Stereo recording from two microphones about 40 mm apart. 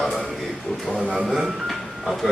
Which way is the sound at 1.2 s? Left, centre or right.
Centre.